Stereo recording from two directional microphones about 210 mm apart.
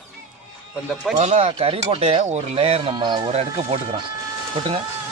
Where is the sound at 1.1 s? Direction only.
30° right (ahead or behind).